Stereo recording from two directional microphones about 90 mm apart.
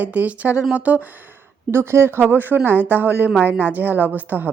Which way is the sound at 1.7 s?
30° right (ahead or behind).